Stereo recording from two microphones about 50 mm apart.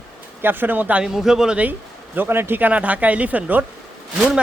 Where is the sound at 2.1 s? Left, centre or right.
Right.